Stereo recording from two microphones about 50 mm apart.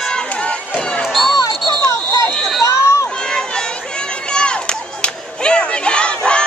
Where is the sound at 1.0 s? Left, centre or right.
Centre.